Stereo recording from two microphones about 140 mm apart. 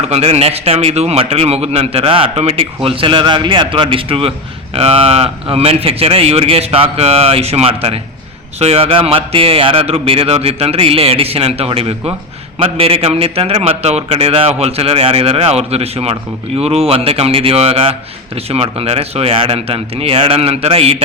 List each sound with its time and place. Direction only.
0.1 s speech: 45° right (ahead or behind)